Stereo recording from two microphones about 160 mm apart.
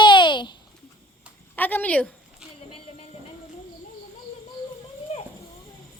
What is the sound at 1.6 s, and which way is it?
Speech, 10° left (ahead or behind).